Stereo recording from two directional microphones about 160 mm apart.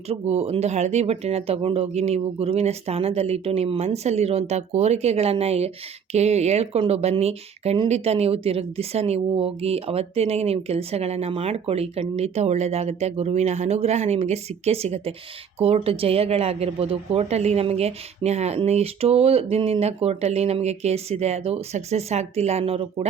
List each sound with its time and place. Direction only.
0.1 s speech: 40° right (ahead or behind)